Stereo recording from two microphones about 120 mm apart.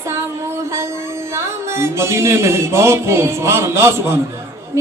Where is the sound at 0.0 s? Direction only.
20° right (ahead or behind).